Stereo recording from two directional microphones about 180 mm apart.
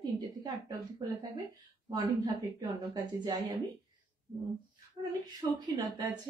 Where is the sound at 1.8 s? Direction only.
25° right (ahead or behind).